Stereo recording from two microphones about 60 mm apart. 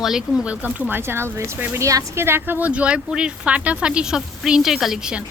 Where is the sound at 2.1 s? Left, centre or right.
Right.